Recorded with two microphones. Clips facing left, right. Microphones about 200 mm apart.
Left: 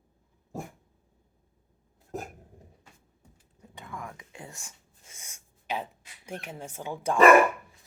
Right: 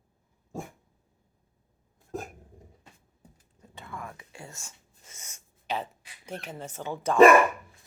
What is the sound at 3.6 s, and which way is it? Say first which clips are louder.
Whispering: even; 10° left (ahead or behind).